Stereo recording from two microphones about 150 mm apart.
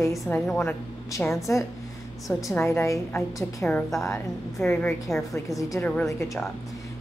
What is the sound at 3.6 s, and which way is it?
A woman's voice, centre (ahead or behind).